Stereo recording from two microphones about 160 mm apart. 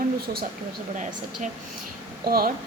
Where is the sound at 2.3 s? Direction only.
70° right (ahead or behind).